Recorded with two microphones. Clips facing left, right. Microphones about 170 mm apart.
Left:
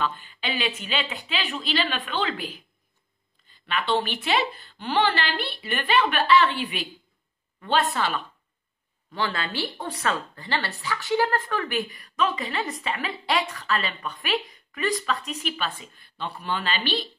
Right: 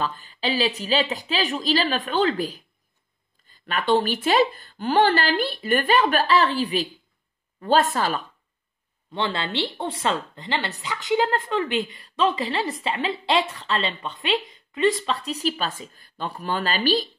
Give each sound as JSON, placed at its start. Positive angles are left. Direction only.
{"t": 0.0, "sound": "speech", "side_deg": -40}
{"t": 9.1, "sound": "a woman's voice", "side_deg": -25}